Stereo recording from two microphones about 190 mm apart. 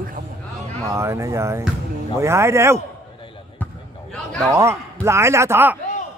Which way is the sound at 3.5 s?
5° left (ahead or behind).